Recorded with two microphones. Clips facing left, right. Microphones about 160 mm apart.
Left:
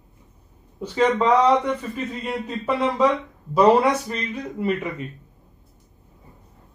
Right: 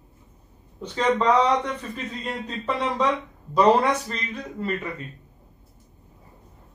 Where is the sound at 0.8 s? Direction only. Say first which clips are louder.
Left 2 dB; 10° left (ahead or behind).